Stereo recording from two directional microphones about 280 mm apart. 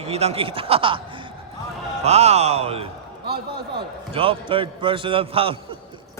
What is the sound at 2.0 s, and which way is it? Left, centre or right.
Speech, right.